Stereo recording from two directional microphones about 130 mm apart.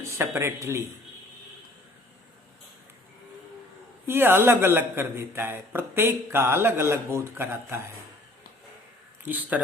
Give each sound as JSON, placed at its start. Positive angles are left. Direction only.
{"t": 0.0, "sound": "speech", "side_deg": -20}
{"t": 4.0, "sound": "speech", "side_deg": -15}